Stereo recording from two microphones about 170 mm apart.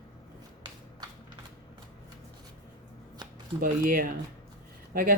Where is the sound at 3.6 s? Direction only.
55° right (ahead or behind).